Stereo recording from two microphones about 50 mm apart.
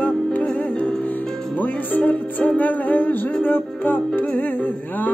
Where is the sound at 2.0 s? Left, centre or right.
Left.